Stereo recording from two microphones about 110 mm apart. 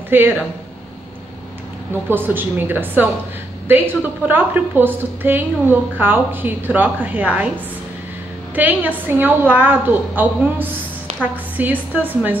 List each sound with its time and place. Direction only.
0.1 s a woman's voice: 20° right (ahead or behind)
2.0 s a woman's voice: 20° right (ahead or behind)